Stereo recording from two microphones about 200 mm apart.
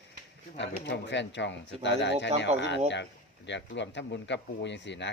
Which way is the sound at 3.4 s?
60° left (ahead or behind).